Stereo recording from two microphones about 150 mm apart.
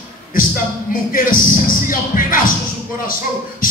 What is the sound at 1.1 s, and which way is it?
Music, 70° left (ahead or behind).